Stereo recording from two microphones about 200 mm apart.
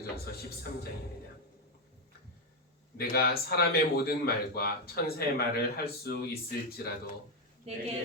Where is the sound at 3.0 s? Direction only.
50° left (ahead or behind).